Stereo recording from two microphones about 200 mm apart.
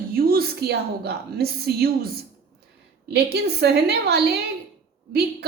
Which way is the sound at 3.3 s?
55° right (ahead or behind).